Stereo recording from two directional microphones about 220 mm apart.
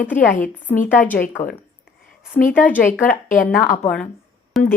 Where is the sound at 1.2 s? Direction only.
40° left (ahead or behind).